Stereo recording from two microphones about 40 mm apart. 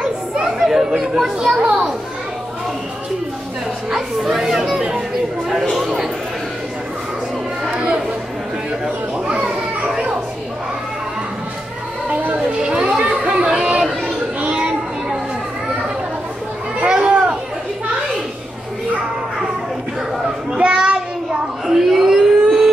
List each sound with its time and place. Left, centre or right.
0.0 s children playing: centre
1.6 s a child's voice: right
3.9 s speech: centre
7.7 s chatter: right
9.3 s children playing: right
12.1 s music: right
12.5 s children playing: right
13.0 s chatter: right
16.8 s chatter: right
20.5 s child singing: right
21.6 s a sound: centre